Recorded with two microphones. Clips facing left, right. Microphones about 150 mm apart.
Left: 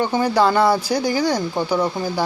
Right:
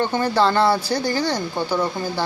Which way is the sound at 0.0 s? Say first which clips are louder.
Left 2 dB; 10° left (ahead or behind).